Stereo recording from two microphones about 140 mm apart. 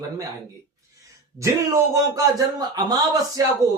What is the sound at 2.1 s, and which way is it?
Speech, 25° right (ahead or behind).